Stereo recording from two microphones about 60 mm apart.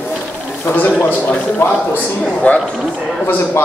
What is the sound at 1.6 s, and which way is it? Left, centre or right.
Speech, left.